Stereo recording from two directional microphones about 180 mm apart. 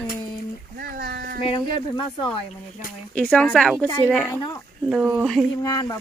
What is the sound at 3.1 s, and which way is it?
Speech, 5° left (ahead or behind).